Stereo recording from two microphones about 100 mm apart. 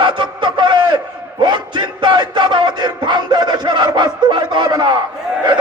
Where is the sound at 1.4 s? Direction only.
50° right (ahead or behind).